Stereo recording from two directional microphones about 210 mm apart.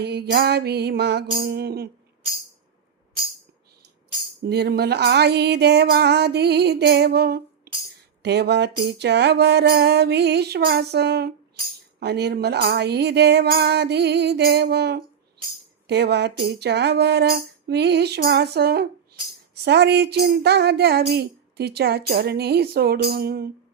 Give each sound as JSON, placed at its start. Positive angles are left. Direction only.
{"t": 0.0, "sound": "speech", "side_deg": -50}
{"t": 4.4, "sound": "speech", "side_deg": -50}